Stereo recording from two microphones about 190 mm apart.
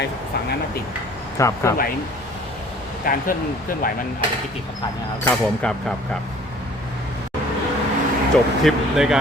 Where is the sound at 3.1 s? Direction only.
50° left (ahead or behind).